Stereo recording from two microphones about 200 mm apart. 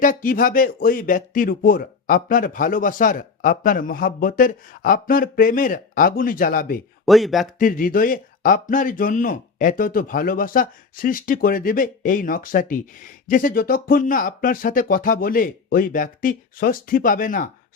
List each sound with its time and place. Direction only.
0.0 s speech: 45° left (ahead or behind)
7.0 s speech: centre (ahead or behind)
7.6 s speech: 45° left (ahead or behind)